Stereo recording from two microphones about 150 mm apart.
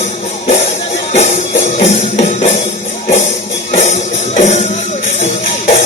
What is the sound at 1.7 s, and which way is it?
Music, 45° left (ahead or behind).